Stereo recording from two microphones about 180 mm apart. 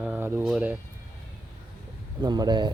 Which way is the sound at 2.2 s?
25° right (ahead or behind).